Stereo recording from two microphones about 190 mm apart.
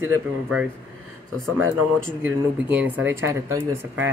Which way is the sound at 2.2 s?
10° right (ahead or behind).